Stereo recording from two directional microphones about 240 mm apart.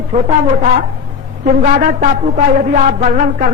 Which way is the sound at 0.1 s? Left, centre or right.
Right.